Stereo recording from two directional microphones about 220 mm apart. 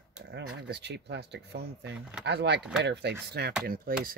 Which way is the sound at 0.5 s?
50° right (ahead or behind).